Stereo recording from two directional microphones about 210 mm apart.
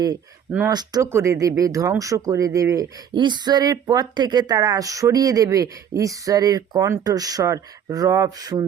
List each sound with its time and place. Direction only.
0.7 s speech: 20° right (ahead or behind)